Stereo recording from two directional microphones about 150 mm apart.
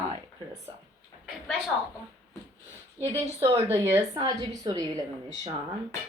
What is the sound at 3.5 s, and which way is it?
A woman's voice, 20° right (ahead or behind).